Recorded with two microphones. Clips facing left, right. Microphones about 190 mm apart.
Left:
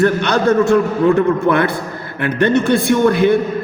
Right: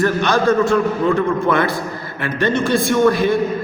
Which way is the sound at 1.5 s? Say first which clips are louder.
Left 2 dB; 60° left (ahead or behind).